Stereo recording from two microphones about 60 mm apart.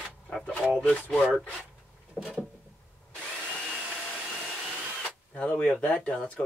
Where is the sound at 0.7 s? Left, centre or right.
Centre.